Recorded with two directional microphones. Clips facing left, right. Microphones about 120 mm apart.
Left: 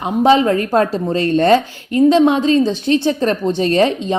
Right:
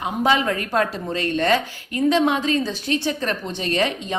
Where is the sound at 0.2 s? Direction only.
30° left (ahead or behind).